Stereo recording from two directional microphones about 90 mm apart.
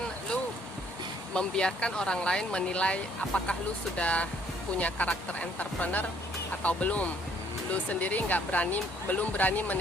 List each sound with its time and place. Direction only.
1.3 s speech: 10° left (ahead or behind)